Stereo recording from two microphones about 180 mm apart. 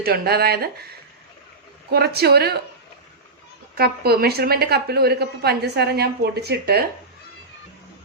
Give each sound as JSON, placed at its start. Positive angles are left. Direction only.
{"t": 0.0, "sound": "a woman's voice", "side_deg": -60}
{"t": 1.9, "sound": "a woman's voice", "side_deg": -60}
{"t": 3.8, "sound": "a woman's voice", "side_deg": -60}